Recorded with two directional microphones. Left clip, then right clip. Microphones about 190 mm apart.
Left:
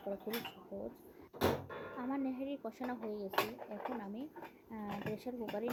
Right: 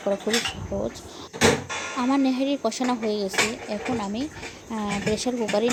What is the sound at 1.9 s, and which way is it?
Speech, 35° right (ahead or behind).